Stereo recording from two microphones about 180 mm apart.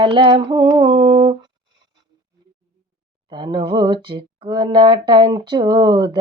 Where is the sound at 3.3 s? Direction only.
25° right (ahead or behind).